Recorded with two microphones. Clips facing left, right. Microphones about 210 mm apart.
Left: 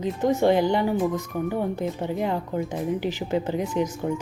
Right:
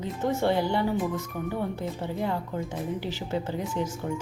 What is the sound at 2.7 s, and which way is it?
Speech, 15° left (ahead or behind).